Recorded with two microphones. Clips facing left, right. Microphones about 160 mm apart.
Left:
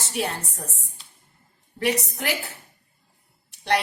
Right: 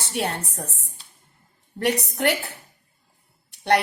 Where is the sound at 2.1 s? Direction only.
60° right (ahead or behind).